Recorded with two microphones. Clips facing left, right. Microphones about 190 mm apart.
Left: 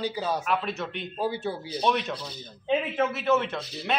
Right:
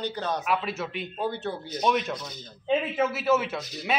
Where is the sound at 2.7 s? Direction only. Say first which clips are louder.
Right 1 dB; 5° right (ahead or behind).